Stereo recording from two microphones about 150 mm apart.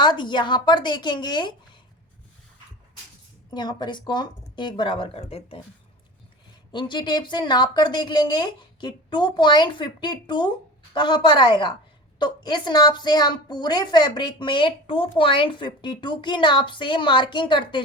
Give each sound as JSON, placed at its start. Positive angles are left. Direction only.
{"t": 0.0, "sound": "a woman's voice", "side_deg": 30}
{"t": 3.5, "sound": "a woman's voice", "side_deg": 30}
{"t": 6.7, "sound": "a woman's voice", "side_deg": 30}